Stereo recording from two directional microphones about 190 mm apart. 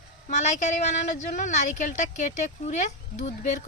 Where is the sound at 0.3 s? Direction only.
40° left (ahead or behind).